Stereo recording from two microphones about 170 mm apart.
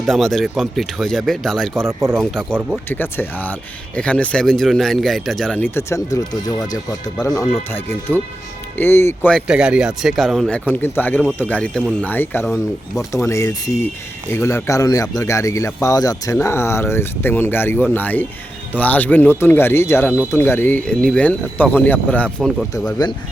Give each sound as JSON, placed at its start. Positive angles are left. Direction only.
{"t": 0.0, "sound": "speech", "side_deg": 0}
{"t": 1.7, "sound": "speech", "side_deg": -15}
{"t": 2.1, "sound": "speech", "side_deg": 5}
{"t": 9.3, "sound": "speech", "side_deg": -5}